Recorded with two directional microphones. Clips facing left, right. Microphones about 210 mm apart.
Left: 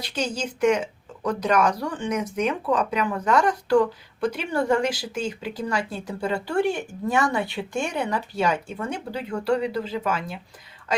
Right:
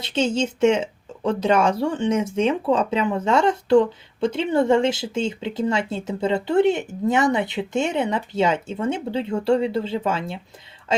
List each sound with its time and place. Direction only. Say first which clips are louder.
0.0 s speech: right 6 dB; 25° right (ahead or behind)